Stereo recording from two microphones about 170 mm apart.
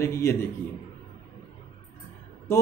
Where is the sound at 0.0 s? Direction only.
15° left (ahead or behind).